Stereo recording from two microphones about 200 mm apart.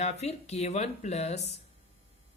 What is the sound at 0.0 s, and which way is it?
Speech, 35° left (ahead or behind).